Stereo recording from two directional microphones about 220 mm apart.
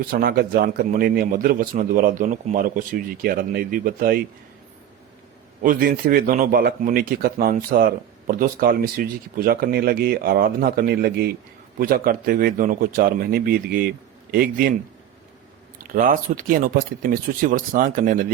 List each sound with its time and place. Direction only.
0.1 s speech: 45° right (ahead or behind)
5.6 s speech: 40° right (ahead or behind)
15.9 s speech: 40° right (ahead or behind)